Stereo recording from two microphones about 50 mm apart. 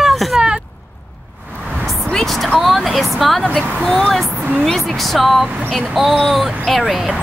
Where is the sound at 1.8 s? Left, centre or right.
Centre.